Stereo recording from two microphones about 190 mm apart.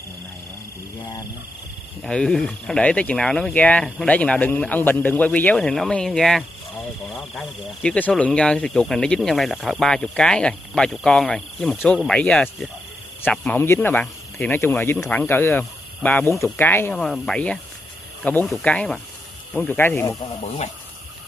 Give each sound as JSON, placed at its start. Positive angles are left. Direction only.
{"t": 2.0, "sound": "speech", "side_deg": 5}
{"t": 20.4, "sound": "speech", "side_deg": 35}